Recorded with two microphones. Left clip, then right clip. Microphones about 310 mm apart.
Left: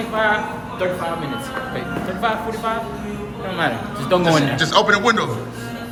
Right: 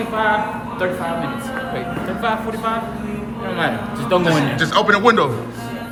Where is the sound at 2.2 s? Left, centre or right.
Centre.